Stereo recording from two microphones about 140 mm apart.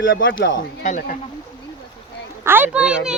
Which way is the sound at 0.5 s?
70° left (ahead or behind).